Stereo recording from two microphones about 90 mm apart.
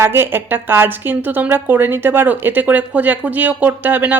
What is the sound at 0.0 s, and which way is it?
A woman's voice, 25° right (ahead or behind).